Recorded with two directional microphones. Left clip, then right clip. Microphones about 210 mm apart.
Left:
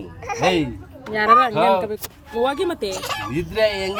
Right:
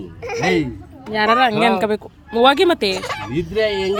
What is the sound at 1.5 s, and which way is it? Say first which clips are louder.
Speech: even; 5° left (ahead or behind).